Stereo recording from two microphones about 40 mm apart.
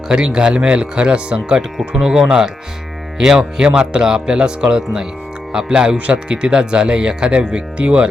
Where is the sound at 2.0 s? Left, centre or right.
Centre.